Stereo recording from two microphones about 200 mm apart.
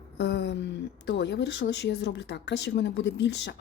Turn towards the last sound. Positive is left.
turn(degrees=60)  # may be behind; listen again after turning